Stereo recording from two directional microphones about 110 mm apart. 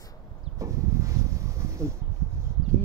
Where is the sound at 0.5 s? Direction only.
30° right (ahead or behind).